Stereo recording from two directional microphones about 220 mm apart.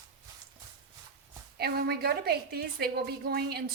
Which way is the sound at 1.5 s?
45° right (ahead or behind).